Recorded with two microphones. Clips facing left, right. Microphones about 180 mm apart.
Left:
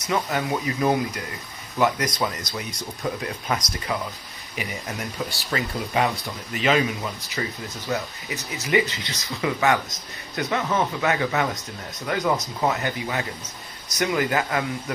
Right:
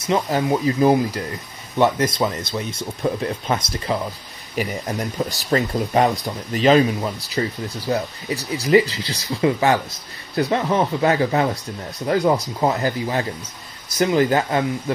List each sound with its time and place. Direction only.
0.0 s speech: 30° right (ahead or behind)
4.6 s speech: 40° right (ahead or behind)